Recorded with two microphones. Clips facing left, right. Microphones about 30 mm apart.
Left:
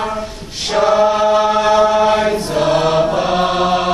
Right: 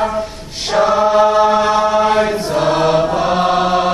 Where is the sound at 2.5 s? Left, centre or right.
Centre.